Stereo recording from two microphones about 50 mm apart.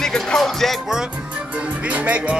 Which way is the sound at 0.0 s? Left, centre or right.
Centre.